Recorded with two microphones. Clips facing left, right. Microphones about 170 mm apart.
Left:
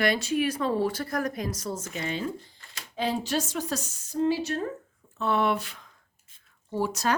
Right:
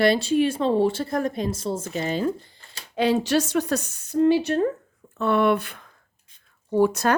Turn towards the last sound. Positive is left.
turn(degrees=-55)  # may be behind; listen again after turning